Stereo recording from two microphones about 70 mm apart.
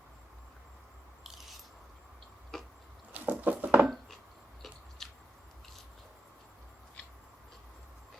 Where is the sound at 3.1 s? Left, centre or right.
Right.